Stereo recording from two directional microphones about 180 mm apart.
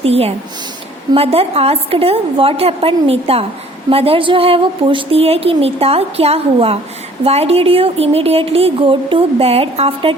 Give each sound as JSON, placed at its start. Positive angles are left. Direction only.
{"t": 0.0, "sound": "a woman's voice", "side_deg": -35}